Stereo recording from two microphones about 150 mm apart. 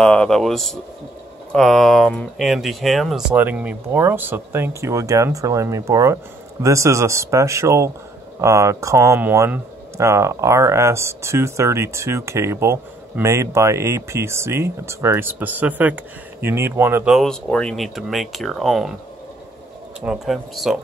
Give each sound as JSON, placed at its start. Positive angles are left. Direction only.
{"t": 0.0, "sound": "speech", "side_deg": 5}
{"t": 17.1, "sound": "speech", "side_deg": 5}
{"t": 20.0, "sound": "speech", "side_deg": 0}